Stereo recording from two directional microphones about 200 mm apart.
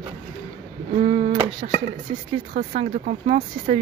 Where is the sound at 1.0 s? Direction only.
30° right (ahead or behind).